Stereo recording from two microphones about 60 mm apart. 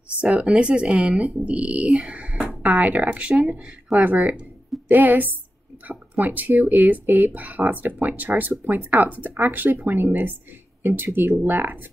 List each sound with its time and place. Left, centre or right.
0.2 s speech: centre
10.8 s speech: right